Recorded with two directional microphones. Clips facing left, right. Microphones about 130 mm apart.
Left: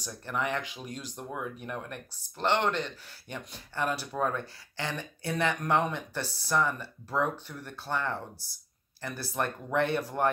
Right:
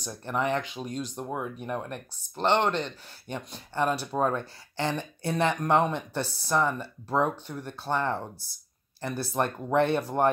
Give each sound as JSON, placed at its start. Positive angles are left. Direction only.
{"t": 0.0, "sound": "speech", "side_deg": -25}